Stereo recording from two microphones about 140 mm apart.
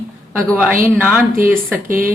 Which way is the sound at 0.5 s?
15° right (ahead or behind).